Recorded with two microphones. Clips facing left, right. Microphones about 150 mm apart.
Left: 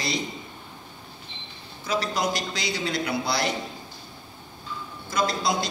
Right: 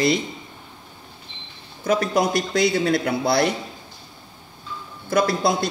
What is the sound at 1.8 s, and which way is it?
A man's voice, 55° right (ahead or behind).